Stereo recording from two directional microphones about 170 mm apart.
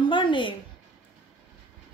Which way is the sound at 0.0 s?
30° left (ahead or behind).